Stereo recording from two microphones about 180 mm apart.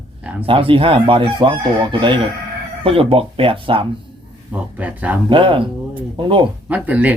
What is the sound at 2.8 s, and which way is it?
Speech, 30° right (ahead or behind).